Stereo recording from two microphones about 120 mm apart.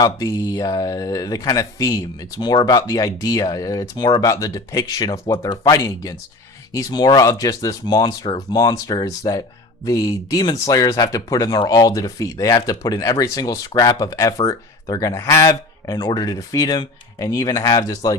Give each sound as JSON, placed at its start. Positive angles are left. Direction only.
{"t": 0.0, "sound": "speech", "side_deg": 30}